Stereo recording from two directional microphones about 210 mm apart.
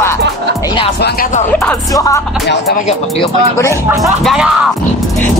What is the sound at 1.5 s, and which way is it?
Speech, 10° left (ahead or behind).